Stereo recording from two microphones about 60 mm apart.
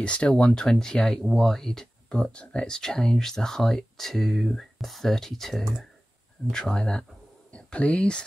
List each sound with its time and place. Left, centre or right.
0.0 s speech: centre
6.5 s speech: centre